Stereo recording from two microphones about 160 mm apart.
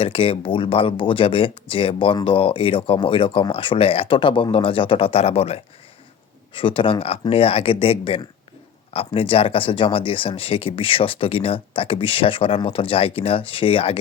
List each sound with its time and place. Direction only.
0.0 s speech: 35° left (ahead or behind)